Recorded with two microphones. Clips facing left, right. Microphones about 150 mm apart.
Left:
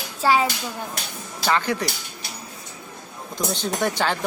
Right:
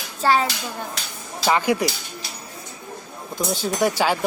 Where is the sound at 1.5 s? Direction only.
10° right (ahead or behind).